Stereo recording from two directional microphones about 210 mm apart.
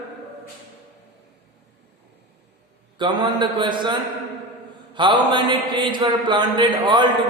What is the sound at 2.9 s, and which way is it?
A man's voice, 20° right (ahead or behind).